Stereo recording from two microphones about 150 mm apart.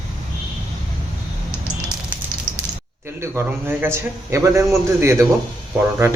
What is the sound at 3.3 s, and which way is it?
A man's voice, 15° right (ahead or behind).